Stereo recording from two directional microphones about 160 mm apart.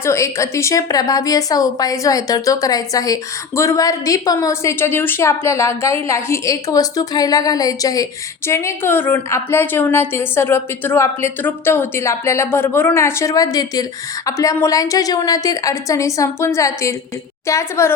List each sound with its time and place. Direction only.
0.0 s a woman's voice: 20° left (ahead or behind)